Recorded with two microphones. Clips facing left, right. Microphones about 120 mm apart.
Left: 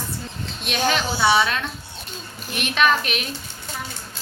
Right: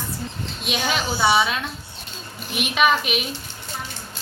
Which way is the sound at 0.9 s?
5° right (ahead or behind).